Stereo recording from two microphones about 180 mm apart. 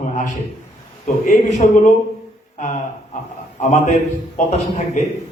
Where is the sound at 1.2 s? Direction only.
45° left (ahead or behind).